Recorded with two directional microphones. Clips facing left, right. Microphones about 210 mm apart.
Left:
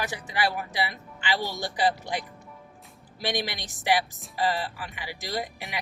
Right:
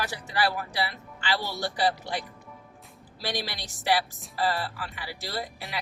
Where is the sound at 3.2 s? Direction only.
15° left (ahead or behind).